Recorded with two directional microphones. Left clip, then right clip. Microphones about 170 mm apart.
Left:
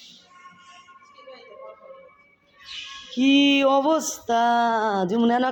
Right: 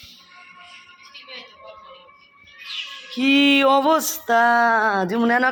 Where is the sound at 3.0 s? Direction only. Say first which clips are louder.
Right 2 dB; 20° left (ahead or behind).